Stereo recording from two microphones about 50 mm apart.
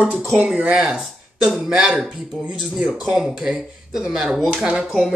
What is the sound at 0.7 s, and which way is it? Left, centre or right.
A woman's voice, centre.